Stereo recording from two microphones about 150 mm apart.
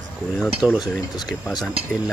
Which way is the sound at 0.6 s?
5° right (ahead or behind).